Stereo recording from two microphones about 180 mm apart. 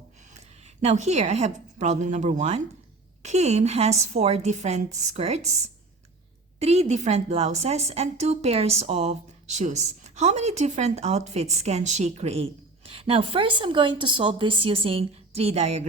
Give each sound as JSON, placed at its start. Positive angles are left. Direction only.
{"t": 0.8, "sound": "a woman's voice", "side_deg": -40}